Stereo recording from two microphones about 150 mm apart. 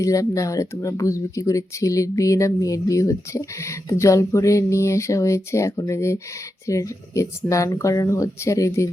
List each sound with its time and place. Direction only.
0.0 s speech: 20° left (ahead or behind)